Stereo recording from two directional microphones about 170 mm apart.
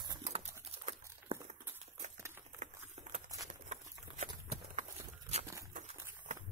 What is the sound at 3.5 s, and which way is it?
Horse, 40° right (ahead or behind).